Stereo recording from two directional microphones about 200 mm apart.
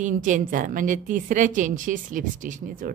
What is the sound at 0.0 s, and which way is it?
A woman's voice, 40° right (ahead or behind).